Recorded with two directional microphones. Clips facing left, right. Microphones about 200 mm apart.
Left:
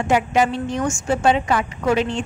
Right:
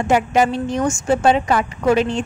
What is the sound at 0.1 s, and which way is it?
A woman's voice, 45° right (ahead or behind).